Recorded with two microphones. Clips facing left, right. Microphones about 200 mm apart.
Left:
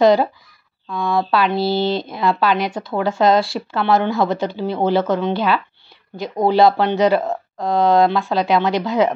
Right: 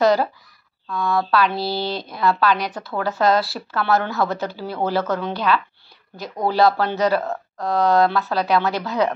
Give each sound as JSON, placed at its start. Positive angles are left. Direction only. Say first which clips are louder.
{"t": 0.0, "sound": "speech", "louder": "left 4 dB", "side_deg": 20}